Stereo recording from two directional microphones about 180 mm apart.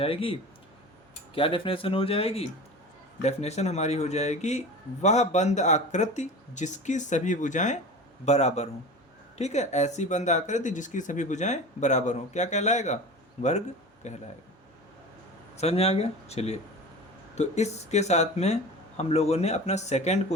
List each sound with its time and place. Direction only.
0.0 s speech: 30° left (ahead or behind)
1.4 s speech: 30° left (ahead or behind)
14.0 s speech: 40° left (ahead or behind)
15.5 s speech: 35° left (ahead or behind)